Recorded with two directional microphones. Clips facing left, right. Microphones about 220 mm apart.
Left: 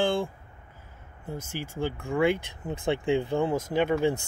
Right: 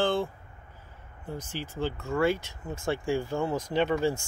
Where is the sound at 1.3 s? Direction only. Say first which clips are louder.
Left 1 dB; 10° left (ahead or behind).